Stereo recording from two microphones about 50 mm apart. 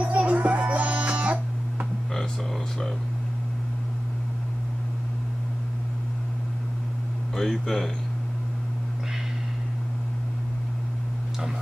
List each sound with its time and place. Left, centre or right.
0.0 s music: right
7.3 s speech: centre